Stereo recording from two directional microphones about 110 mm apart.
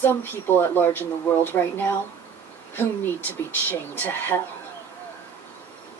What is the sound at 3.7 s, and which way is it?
Speech, 15° left (ahead or behind).